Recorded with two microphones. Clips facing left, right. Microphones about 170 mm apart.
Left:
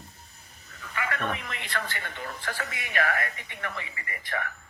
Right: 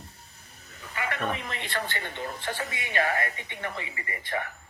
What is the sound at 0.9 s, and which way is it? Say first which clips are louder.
A man's voice: even; 25° right (ahead or behind).